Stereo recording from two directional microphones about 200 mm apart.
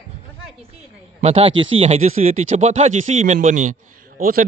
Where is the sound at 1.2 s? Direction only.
30° right (ahead or behind).